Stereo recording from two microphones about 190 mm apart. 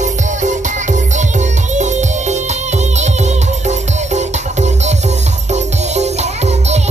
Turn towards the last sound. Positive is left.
turn(degrees=-35)  # may be behind; listen again after turning